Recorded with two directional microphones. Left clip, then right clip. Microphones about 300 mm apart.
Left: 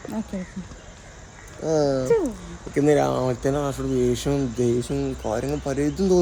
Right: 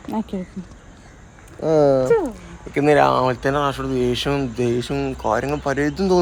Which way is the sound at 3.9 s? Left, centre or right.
Centre.